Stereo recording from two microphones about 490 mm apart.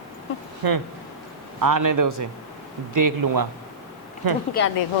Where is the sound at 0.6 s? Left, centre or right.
Right.